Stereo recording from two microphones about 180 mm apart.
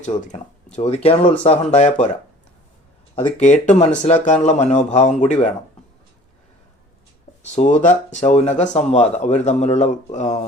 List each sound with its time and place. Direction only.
0.0 s speech: 40° left (ahead or behind)
3.4 s speech: 40° left (ahead or behind)
7.4 s speech: 40° left (ahead or behind)